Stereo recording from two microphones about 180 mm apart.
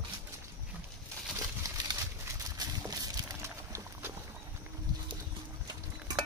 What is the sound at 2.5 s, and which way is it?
Clip-clop, 20° right (ahead or behind).